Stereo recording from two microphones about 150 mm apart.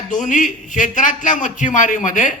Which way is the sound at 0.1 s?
55° left (ahead or behind).